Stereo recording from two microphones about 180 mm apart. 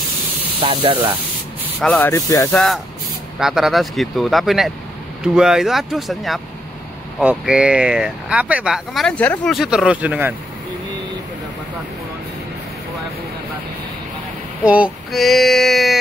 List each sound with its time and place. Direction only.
0.6 s speech: 30° right (ahead or behind)
1.8 s speech: 5° left (ahead or behind)
2.5 s speech: centre (ahead or behind)
14.6 s speech: 5° right (ahead or behind)